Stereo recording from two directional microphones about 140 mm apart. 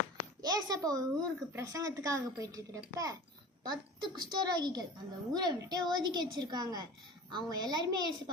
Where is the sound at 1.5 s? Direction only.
25° right (ahead or behind).